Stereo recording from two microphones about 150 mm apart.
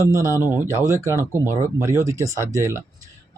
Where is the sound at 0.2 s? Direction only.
20° right (ahead or behind).